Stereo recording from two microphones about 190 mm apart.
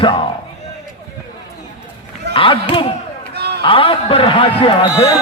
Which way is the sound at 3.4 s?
60° right (ahead or behind).